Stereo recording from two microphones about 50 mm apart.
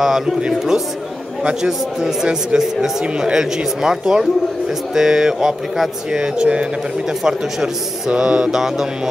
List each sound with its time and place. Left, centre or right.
0.4 s a man's voice: centre